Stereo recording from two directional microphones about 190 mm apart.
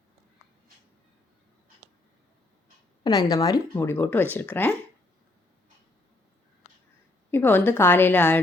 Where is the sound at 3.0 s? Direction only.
20° left (ahead or behind).